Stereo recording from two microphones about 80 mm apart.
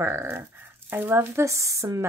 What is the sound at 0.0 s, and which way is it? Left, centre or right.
Speech, right.